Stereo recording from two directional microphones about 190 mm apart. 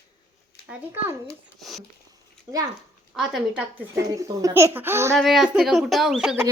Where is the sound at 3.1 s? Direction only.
5° right (ahead or behind).